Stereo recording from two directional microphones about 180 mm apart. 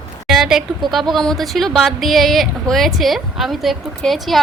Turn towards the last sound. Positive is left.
turn(degrees=0)  # may be behind; listen again after turning